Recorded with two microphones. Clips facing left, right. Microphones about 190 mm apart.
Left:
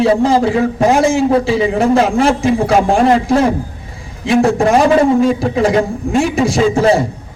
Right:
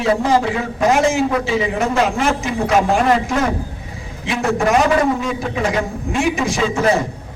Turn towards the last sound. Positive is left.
turn(degrees=30)  # may be behind; listen again after turning